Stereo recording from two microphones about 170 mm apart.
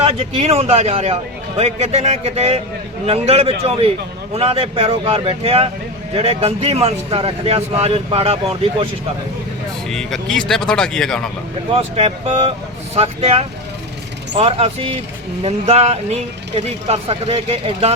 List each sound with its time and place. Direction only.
0.0 s speech: 35° right (ahead or behind)
9.9 s speech: centre (ahead or behind)
11.7 s speech: 35° right (ahead or behind)